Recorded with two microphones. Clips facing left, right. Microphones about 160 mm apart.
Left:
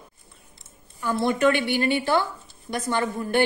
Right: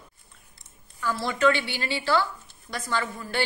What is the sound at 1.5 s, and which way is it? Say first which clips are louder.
Speech: left 1 dB; 55° left (ahead or behind).